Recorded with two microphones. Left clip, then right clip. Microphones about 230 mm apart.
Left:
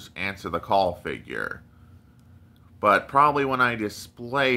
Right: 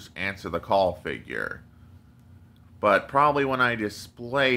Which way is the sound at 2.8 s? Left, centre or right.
Centre.